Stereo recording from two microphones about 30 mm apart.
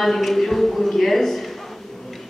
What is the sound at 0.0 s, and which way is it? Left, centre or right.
Speech, centre.